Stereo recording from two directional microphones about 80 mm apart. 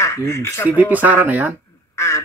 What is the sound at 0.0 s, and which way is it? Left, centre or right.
Speech, left.